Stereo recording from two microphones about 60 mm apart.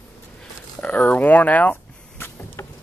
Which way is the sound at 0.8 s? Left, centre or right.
Left.